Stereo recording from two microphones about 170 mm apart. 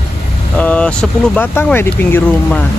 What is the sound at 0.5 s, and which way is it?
Speech, 10° left (ahead or behind).